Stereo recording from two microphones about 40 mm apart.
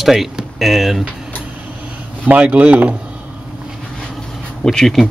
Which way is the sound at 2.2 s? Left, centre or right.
Right.